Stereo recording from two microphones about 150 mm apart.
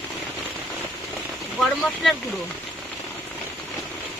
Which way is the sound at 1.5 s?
Centre (ahead or behind).